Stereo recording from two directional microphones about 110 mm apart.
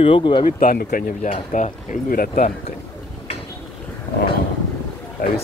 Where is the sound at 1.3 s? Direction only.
90° left.